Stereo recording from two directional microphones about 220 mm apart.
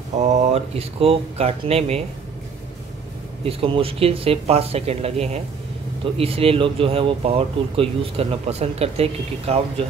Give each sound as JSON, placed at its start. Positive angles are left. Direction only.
{"t": 0.1, "sound": "speech", "side_deg": -30}
{"t": 3.4, "sound": "speech", "side_deg": -25}